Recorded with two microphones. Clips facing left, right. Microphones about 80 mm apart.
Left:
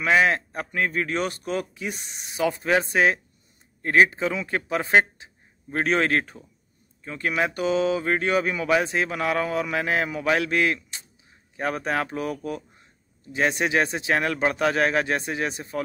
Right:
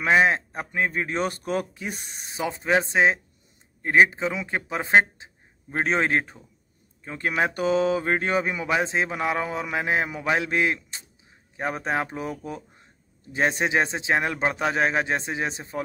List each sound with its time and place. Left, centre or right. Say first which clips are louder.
0.0 s a man's voice: even; right
2.3 s speech: left 1 dB; right
13.3 s speech: even; right